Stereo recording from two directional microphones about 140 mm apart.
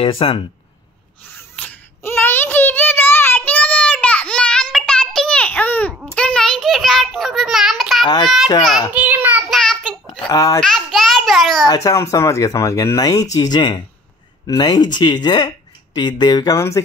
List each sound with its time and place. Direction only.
0.0 s speech: 40° left (ahead or behind)
1.6 s a sound: 15° left (ahead or behind); by 8.1 s centre (ahead or behind)
8.9 s child singing: 10° right (ahead or behind)
9.5 s child singing: 5° left (ahead or behind)
10.2 s a child's voice: 25° left (ahead or behind)
10.6 s a sound: 5° left (ahead or behind)
11.6 s speech: 25° left (ahead or behind)